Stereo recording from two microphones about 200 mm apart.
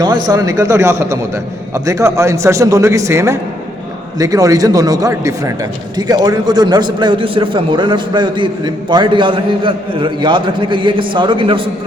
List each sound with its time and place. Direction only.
0.3 s a man's voice: 15° right (ahead or behind)